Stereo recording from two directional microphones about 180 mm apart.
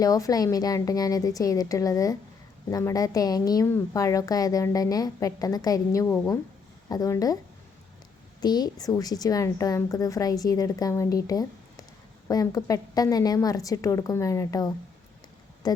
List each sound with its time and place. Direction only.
0.0 s a woman's voice: 20° left (ahead or behind)
8.4 s a woman's voice: 20° left (ahead or behind)